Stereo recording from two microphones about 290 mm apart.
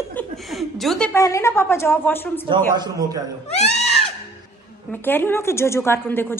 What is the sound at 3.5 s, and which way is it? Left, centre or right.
Screaming, left.